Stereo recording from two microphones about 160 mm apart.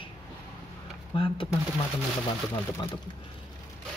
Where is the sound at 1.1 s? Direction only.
35° left (ahead or behind).